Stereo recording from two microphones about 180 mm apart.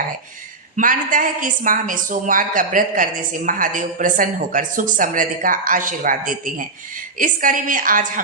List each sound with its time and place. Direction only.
0.8 s a woman's voice: 50° right (ahead or behind)